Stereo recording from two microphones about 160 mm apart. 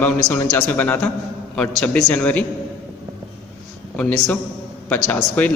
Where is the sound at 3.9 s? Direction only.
5° left (ahead or behind).